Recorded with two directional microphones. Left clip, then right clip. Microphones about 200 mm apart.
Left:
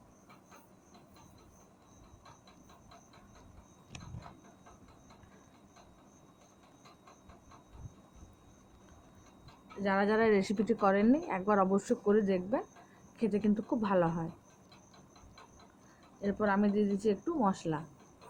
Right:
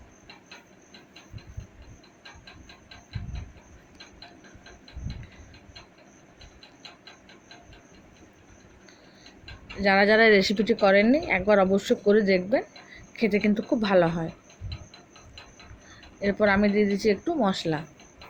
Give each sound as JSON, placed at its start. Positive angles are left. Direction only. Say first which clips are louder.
{"t": 9.8, "sound": "speech", "louder": "right 11 dB", "side_deg": -15}
{"t": 16.2, "sound": "speech", "louder": "right 9 dB", "side_deg": -15}